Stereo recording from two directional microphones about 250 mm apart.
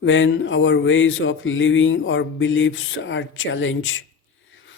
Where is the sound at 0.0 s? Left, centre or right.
Left.